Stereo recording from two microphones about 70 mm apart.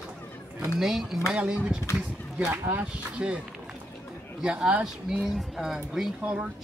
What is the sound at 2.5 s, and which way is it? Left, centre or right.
Speech, right.